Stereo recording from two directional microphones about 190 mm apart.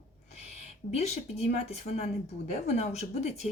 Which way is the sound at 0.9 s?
35° left (ahead or behind).